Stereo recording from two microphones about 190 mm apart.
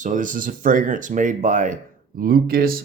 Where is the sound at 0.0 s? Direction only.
40° right (ahead or behind).